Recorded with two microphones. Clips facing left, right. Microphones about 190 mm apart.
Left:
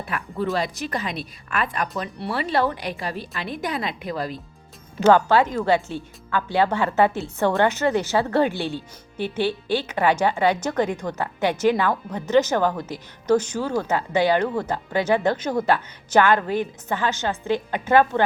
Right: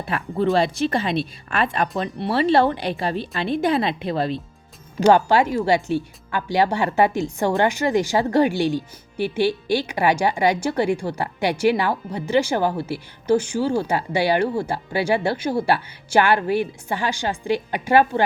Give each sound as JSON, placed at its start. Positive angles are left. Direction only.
{"t": 0.0, "sound": "speech", "side_deg": -30}
{"t": 5.0, "sound": "speech", "side_deg": -15}
{"t": 14.4, "sound": "speech", "side_deg": -25}
{"t": 14.7, "sound": "speech", "side_deg": -10}